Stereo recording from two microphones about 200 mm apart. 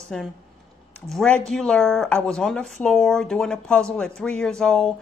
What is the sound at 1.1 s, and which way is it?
A woman's voice, 5° left (ahead or behind).